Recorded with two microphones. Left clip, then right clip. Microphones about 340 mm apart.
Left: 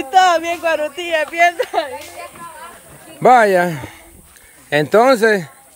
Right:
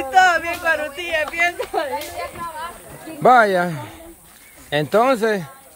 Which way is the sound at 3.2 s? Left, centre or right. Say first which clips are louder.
Left 3 dB; centre.